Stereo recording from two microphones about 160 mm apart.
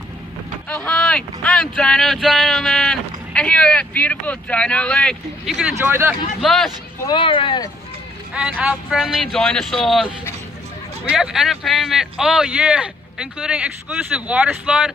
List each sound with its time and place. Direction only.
0.7 s speech: 5° left (ahead or behind)
5.8 s speech: 15° right (ahead or behind)
6.4 s speech: centre (ahead or behind)
7.1 s speech: 30° left (ahead or behind)
8.4 s speech: 5° right (ahead or behind)